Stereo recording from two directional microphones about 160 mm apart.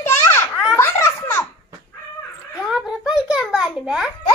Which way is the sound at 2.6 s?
5° right (ahead or behind).